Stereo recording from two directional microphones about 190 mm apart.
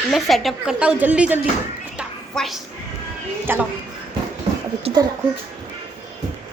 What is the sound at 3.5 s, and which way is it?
Speech, 10° right (ahead or behind).